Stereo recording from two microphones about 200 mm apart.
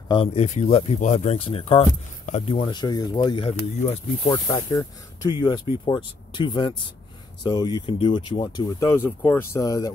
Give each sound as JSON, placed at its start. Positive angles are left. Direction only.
{"t": 0.1, "sound": "speech", "side_deg": 30}
{"t": 3.9, "sound": "speech", "side_deg": 15}